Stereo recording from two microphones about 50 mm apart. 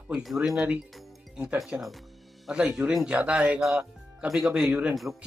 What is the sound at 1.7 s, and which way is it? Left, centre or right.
Speech, right.